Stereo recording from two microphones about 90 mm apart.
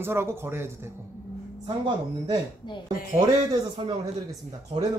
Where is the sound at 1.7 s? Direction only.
50° right (ahead or behind).